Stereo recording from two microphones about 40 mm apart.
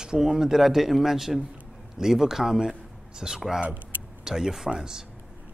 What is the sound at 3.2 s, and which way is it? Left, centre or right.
Speech, centre.